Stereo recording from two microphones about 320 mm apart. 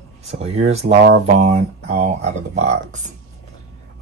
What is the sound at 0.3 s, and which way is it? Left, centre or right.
Speech, centre.